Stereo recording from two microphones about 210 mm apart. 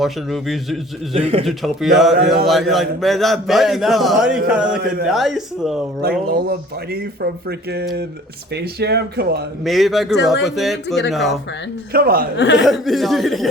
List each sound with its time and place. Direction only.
0.0 s a man's voice: centre (ahead or behind)
1.1 s speech: 30° right (ahead or behind)
1.5 s a man's voice: centre (ahead or behind)
2.1 s speech: 45° right (ahead or behind)
2.5 s a man's voice: centre (ahead or behind)
6.0 s speech: 45° right (ahead or behind)
9.6 s a man's voice: centre (ahead or behind)
11.9 s speech: 45° right (ahead or behind)
12.5 s a man's voice: centre (ahead or behind)